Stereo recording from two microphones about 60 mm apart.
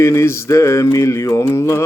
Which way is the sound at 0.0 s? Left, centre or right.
Left.